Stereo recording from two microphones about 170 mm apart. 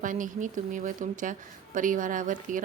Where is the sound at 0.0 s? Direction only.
50° right (ahead or behind).